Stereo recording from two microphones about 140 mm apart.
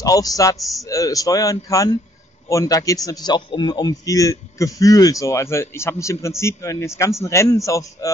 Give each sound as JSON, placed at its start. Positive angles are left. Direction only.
{"t": 0.0, "sound": "a man's voice", "side_deg": 25}